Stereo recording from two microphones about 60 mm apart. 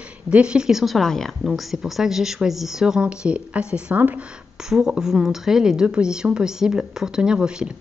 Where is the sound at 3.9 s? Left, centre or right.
Right.